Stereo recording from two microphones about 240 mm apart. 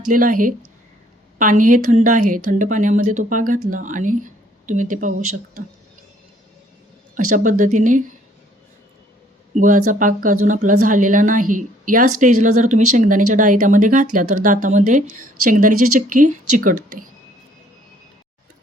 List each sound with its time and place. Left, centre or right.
0.1 s a woman's voice: right
7.3 s a woman's voice: right
9.6 s a woman's voice: right